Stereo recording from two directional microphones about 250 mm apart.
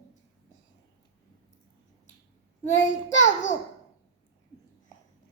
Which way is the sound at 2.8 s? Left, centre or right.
Left.